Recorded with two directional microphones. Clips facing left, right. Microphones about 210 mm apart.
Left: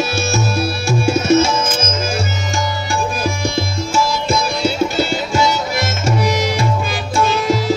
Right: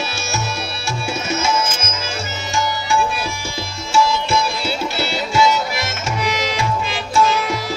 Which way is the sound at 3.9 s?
45° left (ahead or behind).